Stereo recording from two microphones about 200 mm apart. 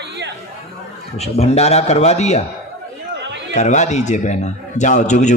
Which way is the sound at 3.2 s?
60° right (ahead or behind).